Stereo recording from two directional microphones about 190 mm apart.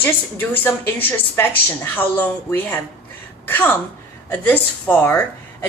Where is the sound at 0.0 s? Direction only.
10° left (ahead or behind).